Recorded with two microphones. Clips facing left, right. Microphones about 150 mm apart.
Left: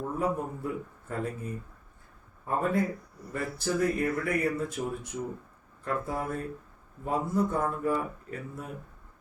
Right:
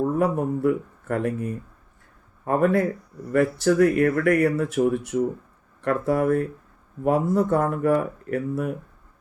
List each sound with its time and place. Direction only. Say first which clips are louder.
0.2 s speech: right 8 dB; 75° right (ahead or behind)